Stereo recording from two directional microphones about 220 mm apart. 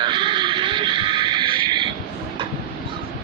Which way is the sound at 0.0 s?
20° right (ahead or behind).